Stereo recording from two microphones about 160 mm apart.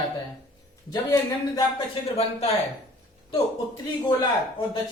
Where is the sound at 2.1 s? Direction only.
40° left (ahead or behind).